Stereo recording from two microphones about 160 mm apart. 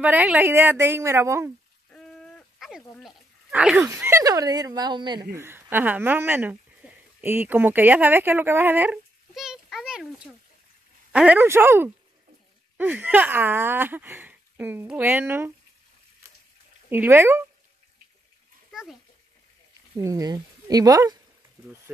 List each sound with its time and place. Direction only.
0.0 s speech: 10° right (ahead or behind)
1.9 s a sound: 5° left (ahead or behind)
3.0 s speech: 5° right (ahead or behind)
3.9 s speech: 15° right (ahead or behind)
5.3 s speech: 15° right (ahead or behind)
16.9 s speech: 15° right (ahead or behind)
18.7 s a sound: 5° right (ahead or behind)
20.0 s speech: 20° right (ahead or behind)